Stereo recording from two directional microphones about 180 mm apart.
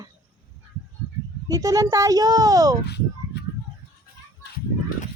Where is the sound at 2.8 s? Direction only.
65° left (ahead or behind).